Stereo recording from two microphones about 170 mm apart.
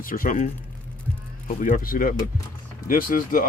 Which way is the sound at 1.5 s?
50° left (ahead or behind).